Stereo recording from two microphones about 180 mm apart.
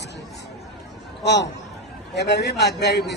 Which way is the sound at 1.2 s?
70° left (ahead or behind).